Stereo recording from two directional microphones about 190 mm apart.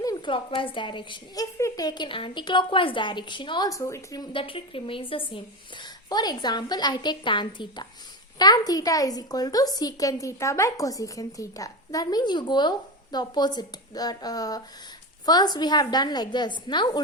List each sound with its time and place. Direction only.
0.0 s a woman's voice: 20° left (ahead or behind)